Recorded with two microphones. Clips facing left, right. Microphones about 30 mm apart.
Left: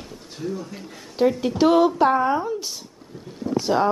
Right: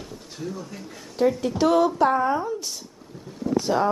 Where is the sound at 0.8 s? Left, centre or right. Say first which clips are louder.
Left 1 dB; left.